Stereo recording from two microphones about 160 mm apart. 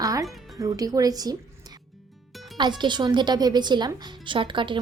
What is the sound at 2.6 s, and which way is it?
Speech, 30° right (ahead or behind).